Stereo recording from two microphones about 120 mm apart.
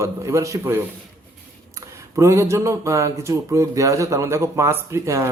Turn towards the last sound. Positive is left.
turn(degrees=-25)  # may be behind; listen again after turning